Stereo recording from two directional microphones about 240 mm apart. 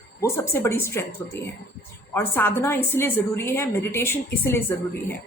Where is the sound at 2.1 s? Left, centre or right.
Centre.